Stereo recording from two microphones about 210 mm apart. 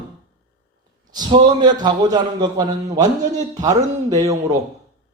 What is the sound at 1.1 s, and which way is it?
A man's voice, 20° right (ahead or behind).